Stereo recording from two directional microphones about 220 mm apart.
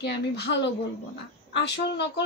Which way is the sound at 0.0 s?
50° left (ahead or behind).